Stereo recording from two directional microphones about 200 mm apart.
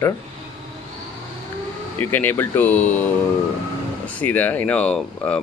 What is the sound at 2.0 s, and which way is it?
Speech, 10° left (ahead or behind).